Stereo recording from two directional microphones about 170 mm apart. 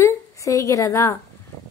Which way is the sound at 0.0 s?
20° left (ahead or behind).